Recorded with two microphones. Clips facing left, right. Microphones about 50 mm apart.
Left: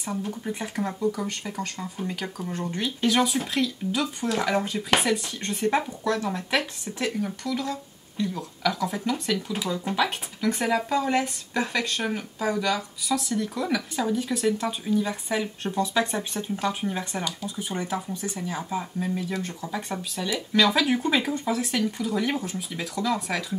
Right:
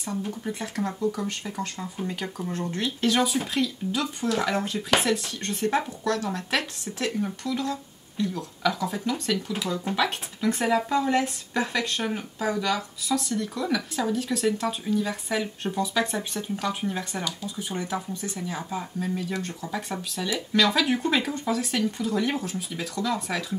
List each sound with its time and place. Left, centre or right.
0.3 s speech: centre
1.1 s speech: centre
2.5 s speech: centre
2.8 s speech: centre
7.2 s speech: centre
17.8 s speech: centre
18.5 s speech: centre
18.9 s speech: centre